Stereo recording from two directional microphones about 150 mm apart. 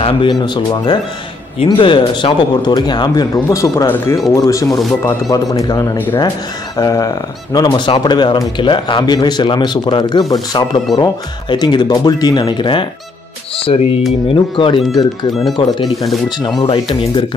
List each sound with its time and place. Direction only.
0.0 s speech: 35° left (ahead or behind)
14.3 s speech: 35° left (ahead or behind)
15.9 s speech: centre (ahead or behind)
16.3 s speech: 30° left (ahead or behind)
16.6 s speech: 40° left (ahead or behind)